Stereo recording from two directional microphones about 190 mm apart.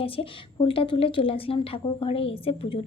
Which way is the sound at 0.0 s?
30° left (ahead or behind).